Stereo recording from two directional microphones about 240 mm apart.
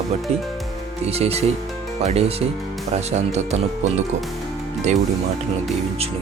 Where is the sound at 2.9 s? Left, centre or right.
Right.